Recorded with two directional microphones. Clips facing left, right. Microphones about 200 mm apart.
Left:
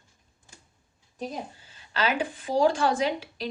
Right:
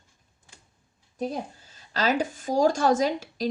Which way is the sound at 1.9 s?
40° right (ahead or behind).